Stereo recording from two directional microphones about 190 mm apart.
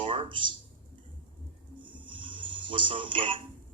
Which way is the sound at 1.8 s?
25° right (ahead or behind).